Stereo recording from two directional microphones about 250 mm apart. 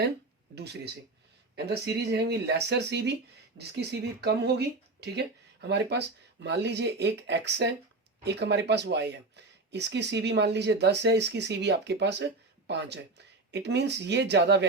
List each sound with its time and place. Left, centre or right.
0.5 s speech: right